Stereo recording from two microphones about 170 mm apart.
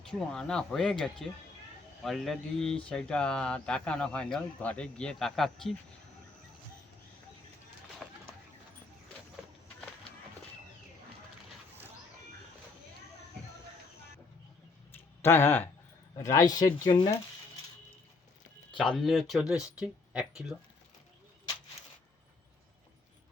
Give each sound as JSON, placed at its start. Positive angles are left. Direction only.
{"t": 0.1, "sound": "speech", "side_deg": 5}
{"t": 8.0, "sound": "bird", "side_deg": 0}
{"t": 15.2, "sound": "speech", "side_deg": 15}
{"t": 18.8, "sound": "speech", "side_deg": 0}